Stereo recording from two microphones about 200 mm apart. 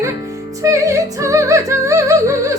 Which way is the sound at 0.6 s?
15° right (ahead or behind).